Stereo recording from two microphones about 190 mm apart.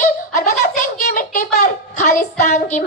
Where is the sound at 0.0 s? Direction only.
40° left (ahead or behind).